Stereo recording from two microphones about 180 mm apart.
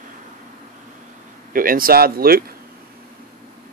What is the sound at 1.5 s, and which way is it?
Speech, 50° right (ahead or behind).